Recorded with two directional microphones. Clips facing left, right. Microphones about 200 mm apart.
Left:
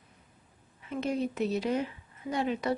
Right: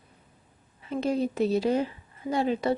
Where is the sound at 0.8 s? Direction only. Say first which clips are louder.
Right 4 dB; 30° right (ahead or behind).